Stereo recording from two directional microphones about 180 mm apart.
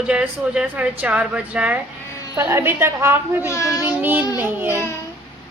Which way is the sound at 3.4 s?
15° left (ahead or behind).